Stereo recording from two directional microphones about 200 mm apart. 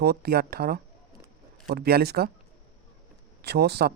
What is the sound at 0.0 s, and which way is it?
Speech, 55° right (ahead or behind).